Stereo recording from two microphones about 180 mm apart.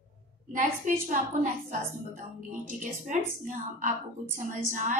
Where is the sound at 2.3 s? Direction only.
45° right (ahead or behind).